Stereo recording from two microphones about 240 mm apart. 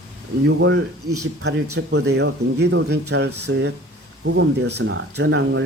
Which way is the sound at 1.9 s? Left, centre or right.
Right.